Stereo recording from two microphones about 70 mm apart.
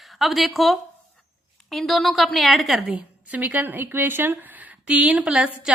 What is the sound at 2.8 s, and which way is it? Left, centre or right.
A woman's voice, centre.